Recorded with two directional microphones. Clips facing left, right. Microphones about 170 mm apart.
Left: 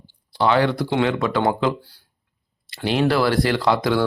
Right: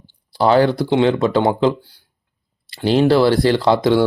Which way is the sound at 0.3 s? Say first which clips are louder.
Right 4 dB; 35° right (ahead or behind).